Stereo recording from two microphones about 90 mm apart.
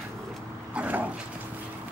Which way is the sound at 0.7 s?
15° right (ahead or behind).